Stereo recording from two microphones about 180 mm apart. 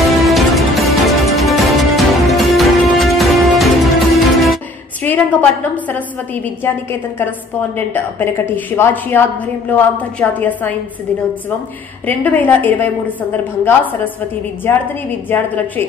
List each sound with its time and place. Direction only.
0.0 s music: centre (ahead or behind)
5.0 s a woman's voice: 10° left (ahead or behind)
12.1 s a woman's voice: 10° left (ahead or behind)